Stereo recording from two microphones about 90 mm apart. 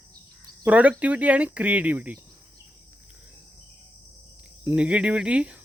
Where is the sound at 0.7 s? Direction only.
15° right (ahead or behind).